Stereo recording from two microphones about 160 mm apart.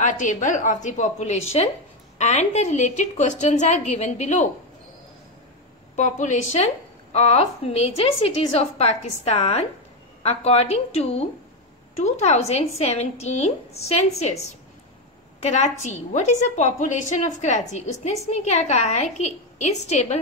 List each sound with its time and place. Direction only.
0.0 s a woman's voice: 50° left (ahead or behind)
5.9 s a woman's voice: 50° left (ahead or behind)
15.4 s a woman's voice: 45° left (ahead or behind)